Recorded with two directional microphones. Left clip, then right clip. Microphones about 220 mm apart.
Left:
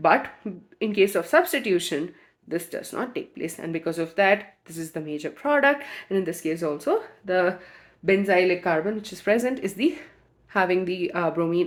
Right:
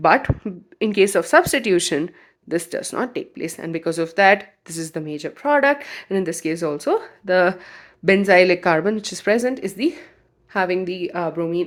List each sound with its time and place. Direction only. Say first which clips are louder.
0.0 s speech: right 4 dB; 30° right (ahead or behind)
9.2 s a woman's voice: right 3 dB; 20° right (ahead or behind)